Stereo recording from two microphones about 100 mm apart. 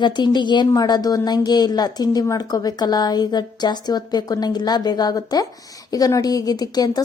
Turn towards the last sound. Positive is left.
turn(degrees=40)  # may be behind; listen again after turning